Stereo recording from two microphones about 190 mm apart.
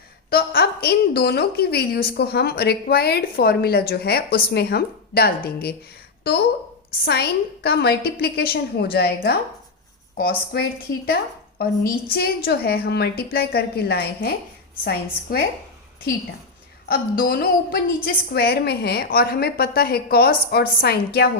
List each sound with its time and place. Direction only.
0.3 s a woman's voice: 55° left (ahead or behind)
7.0 s a woman's voice: 60° left (ahead or behind)
16.9 s a woman's voice: 50° left (ahead or behind)